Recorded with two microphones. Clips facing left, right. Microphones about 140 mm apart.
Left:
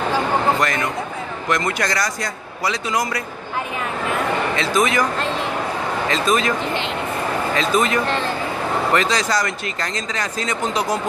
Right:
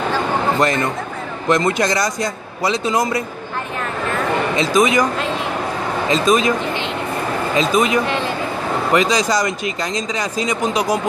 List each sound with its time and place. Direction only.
1.5 s a man's voice: 25° right (ahead or behind)
4.6 s a man's voice: 15° right (ahead or behind)
6.0 s a man's voice: 20° right (ahead or behind)
7.5 s a man's voice: 15° right (ahead or behind)